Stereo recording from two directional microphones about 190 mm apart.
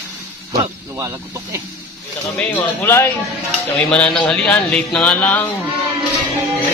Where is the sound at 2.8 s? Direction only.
10° left (ahead or behind).